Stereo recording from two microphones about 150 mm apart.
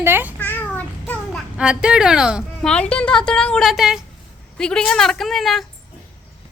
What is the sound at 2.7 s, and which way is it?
Speech, 5° left (ahead or behind).